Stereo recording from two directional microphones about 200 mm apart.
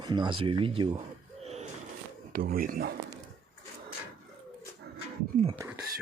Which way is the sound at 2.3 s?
45° right (ahead or behind).